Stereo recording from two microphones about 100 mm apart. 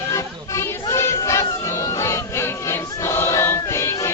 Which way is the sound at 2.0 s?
30° left (ahead or behind).